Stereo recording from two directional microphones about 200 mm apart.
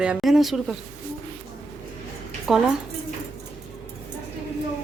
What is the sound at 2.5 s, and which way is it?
Speech, centre (ahead or behind).